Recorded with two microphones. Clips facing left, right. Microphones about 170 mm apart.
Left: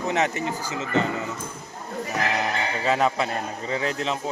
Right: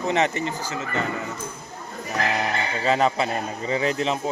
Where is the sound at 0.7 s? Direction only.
20° left (ahead or behind).